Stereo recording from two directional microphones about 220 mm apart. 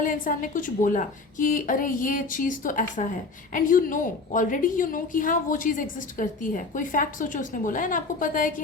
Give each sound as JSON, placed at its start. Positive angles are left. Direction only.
{"t": 0.0, "sound": "a woman's voice", "side_deg": 40}